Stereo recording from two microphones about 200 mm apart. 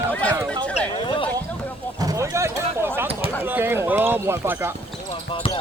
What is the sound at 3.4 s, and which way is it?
Speech, 10° right (ahead or behind).